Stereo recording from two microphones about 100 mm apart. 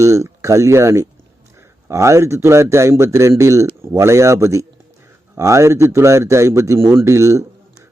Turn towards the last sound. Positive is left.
turn(degrees=-30)  # may be behind; listen again after turning